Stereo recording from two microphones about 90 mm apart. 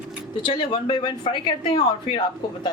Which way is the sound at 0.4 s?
70° left (ahead or behind).